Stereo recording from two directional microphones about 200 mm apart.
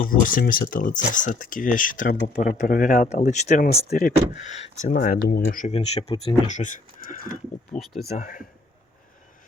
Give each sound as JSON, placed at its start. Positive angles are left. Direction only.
{"t": 0.0, "sound": "speech", "side_deg": 45}
{"t": 5.7, "sound": "speech", "side_deg": 30}